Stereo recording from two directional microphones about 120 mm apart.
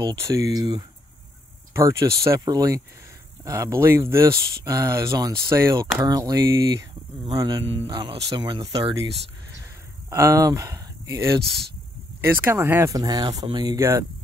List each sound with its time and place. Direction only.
0.0 s speech: 30° right (ahead or behind)
9.6 s a sound: 25° right (ahead or behind)
12.3 s speech: 20° right (ahead or behind)
12.9 s speech: 30° right (ahead or behind)
13.7 s speech: 25° right (ahead or behind)